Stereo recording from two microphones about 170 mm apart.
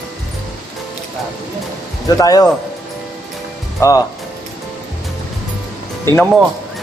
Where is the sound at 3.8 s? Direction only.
20° left (ahead or behind).